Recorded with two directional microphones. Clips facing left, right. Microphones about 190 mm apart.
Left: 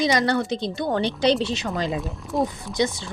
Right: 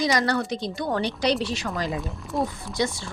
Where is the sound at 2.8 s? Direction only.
20° left (ahead or behind).